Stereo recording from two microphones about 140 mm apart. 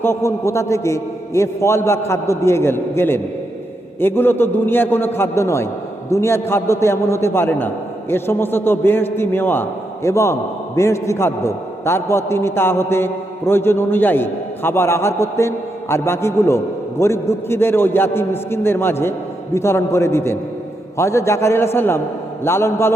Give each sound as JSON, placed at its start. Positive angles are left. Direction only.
{"t": 0.0, "sound": "a man's voice", "side_deg": 20}